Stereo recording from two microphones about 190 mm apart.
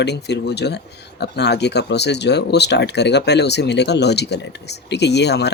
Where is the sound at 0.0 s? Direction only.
60° left (ahead or behind).